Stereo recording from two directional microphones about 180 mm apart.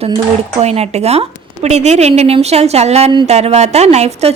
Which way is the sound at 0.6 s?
35° right (ahead or behind).